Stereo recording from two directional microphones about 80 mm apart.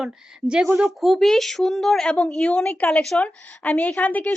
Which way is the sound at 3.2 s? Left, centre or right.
Centre.